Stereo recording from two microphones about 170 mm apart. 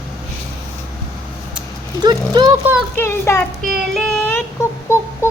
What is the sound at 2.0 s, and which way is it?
Speech, 25° right (ahead or behind).